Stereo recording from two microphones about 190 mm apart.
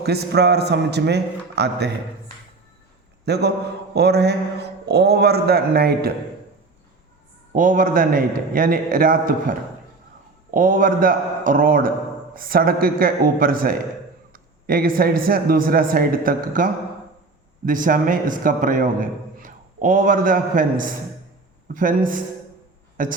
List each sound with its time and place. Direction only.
0.0 s a man's voice: 60° right (ahead or behind)
3.2 s a man's voice: 60° right (ahead or behind)
7.5 s a man's voice: 45° right (ahead or behind)